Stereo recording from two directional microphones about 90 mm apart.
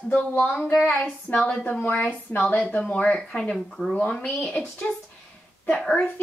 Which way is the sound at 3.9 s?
15° left (ahead or behind).